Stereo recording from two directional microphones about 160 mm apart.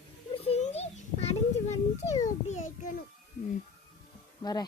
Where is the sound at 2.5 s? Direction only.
50° left (ahead or behind).